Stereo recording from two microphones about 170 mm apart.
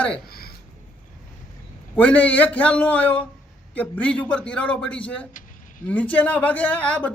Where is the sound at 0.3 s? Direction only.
65° left (ahead or behind).